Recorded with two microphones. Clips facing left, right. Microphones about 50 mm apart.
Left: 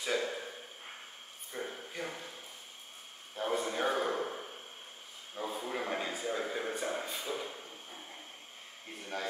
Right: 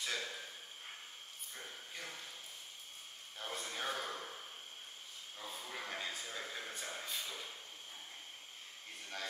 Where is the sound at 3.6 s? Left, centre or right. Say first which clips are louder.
Left 6 dB; centre.